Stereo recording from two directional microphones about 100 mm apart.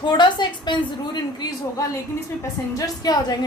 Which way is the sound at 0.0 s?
50° left (ahead or behind).